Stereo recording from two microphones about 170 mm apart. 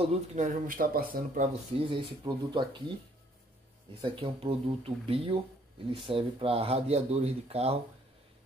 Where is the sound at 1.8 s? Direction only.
25° right (ahead or behind).